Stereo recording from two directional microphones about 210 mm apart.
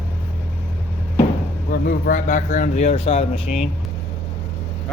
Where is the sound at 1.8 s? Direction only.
40° left (ahead or behind).